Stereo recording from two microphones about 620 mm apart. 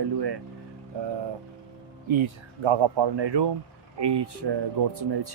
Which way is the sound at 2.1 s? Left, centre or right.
Right.